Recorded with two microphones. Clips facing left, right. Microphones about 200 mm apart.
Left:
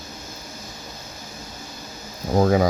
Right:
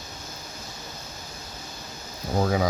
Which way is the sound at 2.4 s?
50° left (ahead or behind).